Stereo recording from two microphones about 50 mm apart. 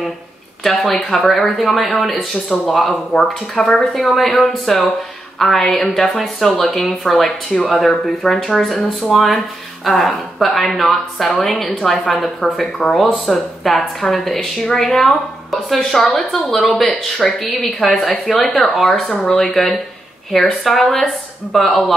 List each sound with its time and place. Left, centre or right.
0.7 s a woman's voice: centre
18.0 s a woman's voice: centre